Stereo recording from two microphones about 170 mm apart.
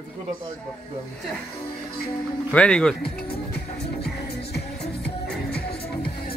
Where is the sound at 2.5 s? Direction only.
5° left (ahead or behind).